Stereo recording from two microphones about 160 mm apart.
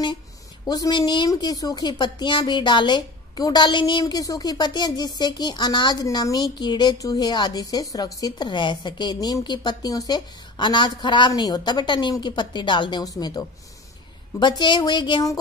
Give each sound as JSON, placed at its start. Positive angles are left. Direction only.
{"t": 0.7, "sound": "a woman's voice", "side_deg": 25}